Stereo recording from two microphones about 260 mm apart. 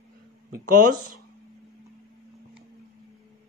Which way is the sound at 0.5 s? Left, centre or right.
Right.